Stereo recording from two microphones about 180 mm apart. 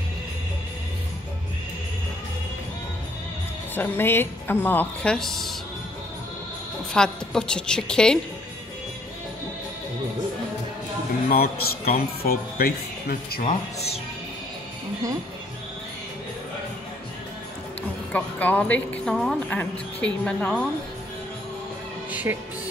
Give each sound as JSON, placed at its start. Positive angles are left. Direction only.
{"t": 3.7, "sound": "speech", "side_deg": 10}
{"t": 6.9, "sound": "a woman's voice", "side_deg": 5}
{"t": 11.2, "sound": "a man's voice", "side_deg": 60}
{"t": 18.1, "sound": "speech", "side_deg": 10}
{"t": 22.1, "sound": "music", "side_deg": -10}